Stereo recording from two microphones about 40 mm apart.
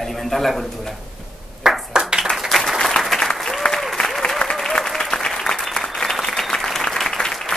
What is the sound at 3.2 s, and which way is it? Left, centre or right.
Applause, centre.